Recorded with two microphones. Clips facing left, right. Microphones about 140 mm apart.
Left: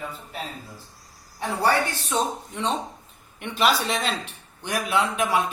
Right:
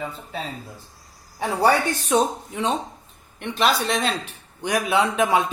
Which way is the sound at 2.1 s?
5° right (ahead or behind).